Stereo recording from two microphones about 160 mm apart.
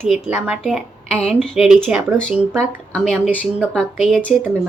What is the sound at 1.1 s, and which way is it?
Speech, 40° left (ahead or behind).